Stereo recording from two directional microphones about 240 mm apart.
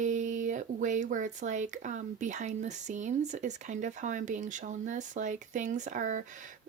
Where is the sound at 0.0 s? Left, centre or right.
Right.